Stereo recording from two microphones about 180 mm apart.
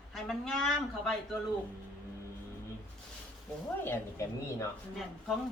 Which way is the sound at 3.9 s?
15° left (ahead or behind).